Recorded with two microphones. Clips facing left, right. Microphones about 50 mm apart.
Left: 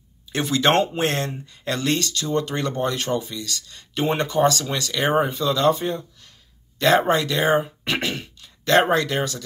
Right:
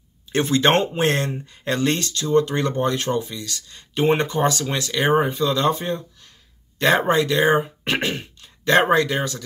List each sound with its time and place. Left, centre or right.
0.4 s speech: right
7.1 s speech: centre
7.8 s speech: right
8.1 s speech: right